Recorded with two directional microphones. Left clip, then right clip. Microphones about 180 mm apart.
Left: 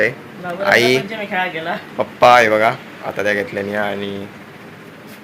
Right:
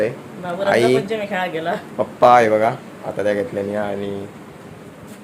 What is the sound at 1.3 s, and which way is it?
Speech, 65° right (ahead or behind).